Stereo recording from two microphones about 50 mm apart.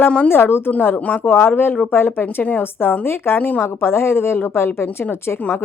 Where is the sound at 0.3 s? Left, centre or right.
Left.